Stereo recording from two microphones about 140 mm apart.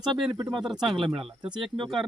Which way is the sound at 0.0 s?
30° right (ahead or behind).